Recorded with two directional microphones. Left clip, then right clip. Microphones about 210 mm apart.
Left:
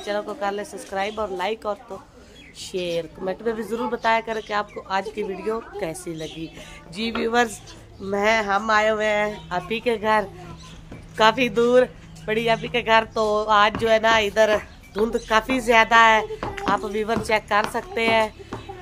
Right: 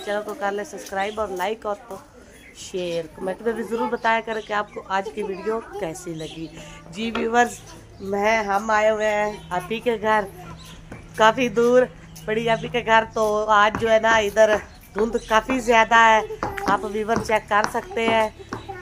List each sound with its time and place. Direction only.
0.0 s a woman's voice: 5° left (ahead or behind)
0.7 s a woman's voice: 10° right (ahead or behind)
2.6 s a woman's voice: 5° left (ahead or behind)